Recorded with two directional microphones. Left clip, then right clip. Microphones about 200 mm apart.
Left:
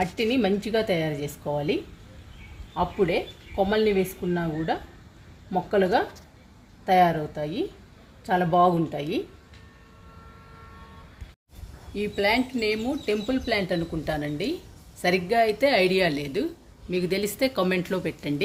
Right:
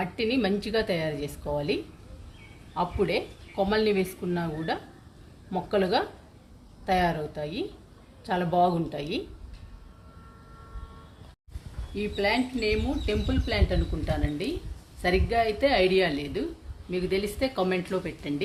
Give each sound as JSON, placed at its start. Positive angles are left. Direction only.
{"t": 0.0, "sound": "a woman's voice", "side_deg": 35}
{"t": 11.9, "sound": "speech", "side_deg": 45}